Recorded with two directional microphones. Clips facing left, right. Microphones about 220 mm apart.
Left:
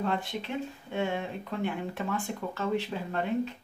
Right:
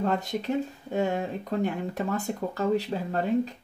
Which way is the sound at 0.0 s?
40° right (ahead or behind).